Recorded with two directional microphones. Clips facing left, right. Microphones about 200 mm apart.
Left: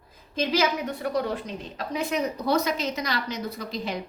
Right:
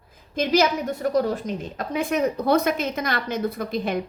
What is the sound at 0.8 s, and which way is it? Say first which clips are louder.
A woman's voice: right 5 dB; 45° right (ahead or behind).